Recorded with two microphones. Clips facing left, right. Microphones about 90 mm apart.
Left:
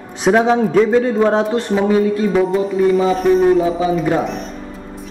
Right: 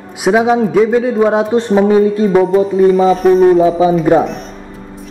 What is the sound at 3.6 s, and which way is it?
Speech, 30° right (ahead or behind).